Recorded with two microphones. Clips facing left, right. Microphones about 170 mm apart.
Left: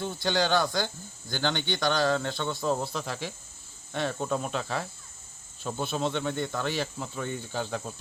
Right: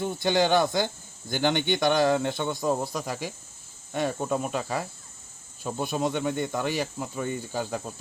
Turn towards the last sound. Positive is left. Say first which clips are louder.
# right 2 dB
turn(degrees=-10)  # may be behind; listen again after turning